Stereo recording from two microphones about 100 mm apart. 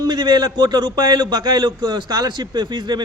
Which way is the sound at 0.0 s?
45° right (ahead or behind).